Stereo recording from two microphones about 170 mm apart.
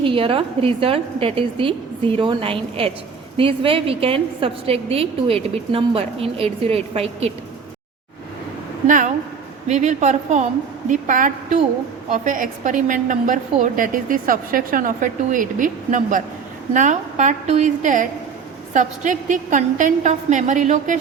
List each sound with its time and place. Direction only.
0.0 s a woman's voice: 30° right (ahead or behind)
8.9 s a woman's voice: 50° right (ahead or behind)